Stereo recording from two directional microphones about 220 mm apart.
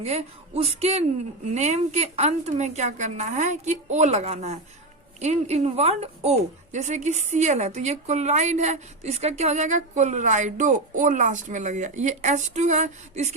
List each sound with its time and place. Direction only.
0.0 s a man's voice: 30° right (ahead or behind)